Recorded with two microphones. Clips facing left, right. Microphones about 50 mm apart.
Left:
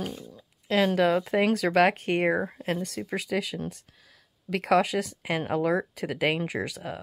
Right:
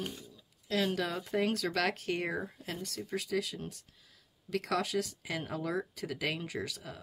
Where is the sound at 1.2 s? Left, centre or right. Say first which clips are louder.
Left 7 dB; left.